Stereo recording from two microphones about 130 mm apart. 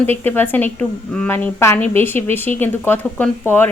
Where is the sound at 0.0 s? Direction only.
15° left (ahead or behind).